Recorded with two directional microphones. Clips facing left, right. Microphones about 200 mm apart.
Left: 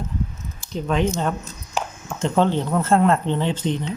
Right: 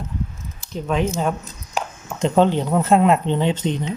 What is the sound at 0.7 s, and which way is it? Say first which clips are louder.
Speech: even; 5° right (ahead or behind).